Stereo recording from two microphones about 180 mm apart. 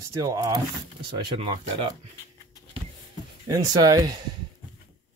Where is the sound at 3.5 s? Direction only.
20° right (ahead or behind).